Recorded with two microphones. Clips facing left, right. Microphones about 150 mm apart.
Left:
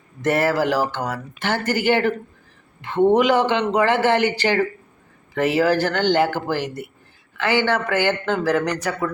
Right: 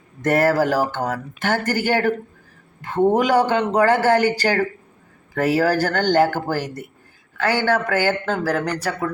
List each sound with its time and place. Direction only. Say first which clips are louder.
0.2 s speech: right 2 dB; 45° right (ahead or behind)